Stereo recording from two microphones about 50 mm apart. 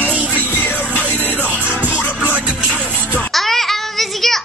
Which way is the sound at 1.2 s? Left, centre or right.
Right.